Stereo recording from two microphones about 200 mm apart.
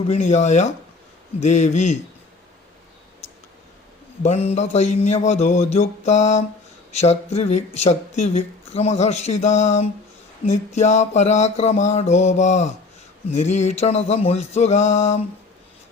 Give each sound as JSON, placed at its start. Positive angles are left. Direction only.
{"t": 0.1, "sound": "speech", "side_deg": 35}
{"t": 4.2, "sound": "speech", "side_deg": 30}